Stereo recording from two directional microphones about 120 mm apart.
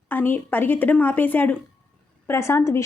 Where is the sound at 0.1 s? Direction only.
15° left (ahead or behind).